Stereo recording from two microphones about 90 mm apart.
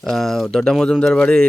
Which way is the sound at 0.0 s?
5° left (ahead or behind).